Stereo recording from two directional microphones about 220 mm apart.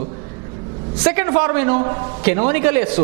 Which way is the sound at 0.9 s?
10° right (ahead or behind).